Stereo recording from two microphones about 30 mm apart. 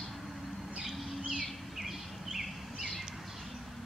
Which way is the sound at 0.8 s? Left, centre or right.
Centre.